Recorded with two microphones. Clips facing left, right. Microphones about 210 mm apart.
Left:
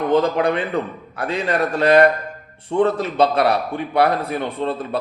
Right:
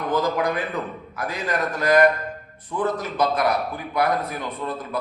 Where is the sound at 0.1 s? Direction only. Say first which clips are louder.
Left 4 dB; 30° left (ahead or behind).